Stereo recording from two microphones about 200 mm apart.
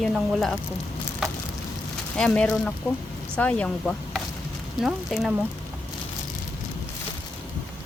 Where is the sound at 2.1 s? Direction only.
5° left (ahead or behind).